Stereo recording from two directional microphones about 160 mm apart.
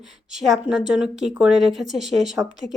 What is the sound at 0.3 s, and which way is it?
Speech, centre (ahead or behind).